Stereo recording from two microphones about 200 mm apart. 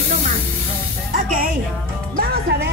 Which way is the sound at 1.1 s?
45° right (ahead or behind).